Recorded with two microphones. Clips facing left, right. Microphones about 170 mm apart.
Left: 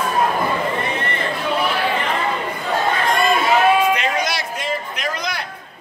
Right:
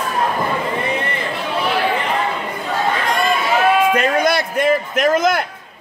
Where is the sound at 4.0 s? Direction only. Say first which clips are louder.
Right 6 dB; 55° right (ahead or behind).